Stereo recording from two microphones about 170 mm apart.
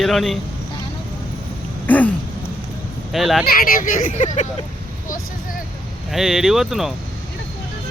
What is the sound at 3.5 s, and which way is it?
Speech, 55° left (ahead or behind).